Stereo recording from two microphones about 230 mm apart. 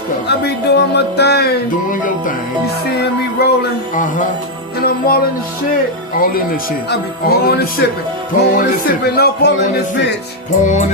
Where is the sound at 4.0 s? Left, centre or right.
Left.